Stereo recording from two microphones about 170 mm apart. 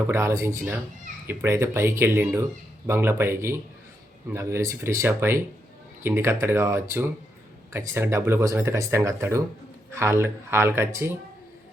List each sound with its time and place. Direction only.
0.1 s speech: 15° right (ahead or behind)